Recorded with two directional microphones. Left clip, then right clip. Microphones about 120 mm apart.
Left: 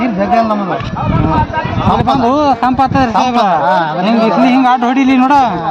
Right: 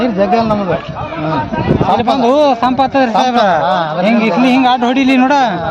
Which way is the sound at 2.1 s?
50° right (ahead or behind).